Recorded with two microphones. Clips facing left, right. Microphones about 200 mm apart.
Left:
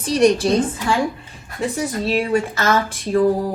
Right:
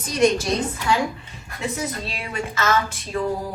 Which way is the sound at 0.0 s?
35° left (ahead or behind).